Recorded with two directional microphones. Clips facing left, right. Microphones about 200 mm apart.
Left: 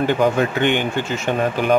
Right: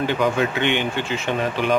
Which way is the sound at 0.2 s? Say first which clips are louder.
Left 3 dB; 45° left (ahead or behind).